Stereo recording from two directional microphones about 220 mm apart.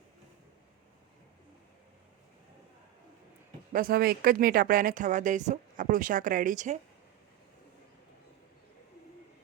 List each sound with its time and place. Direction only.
3.7 s speech: 40° right (ahead or behind)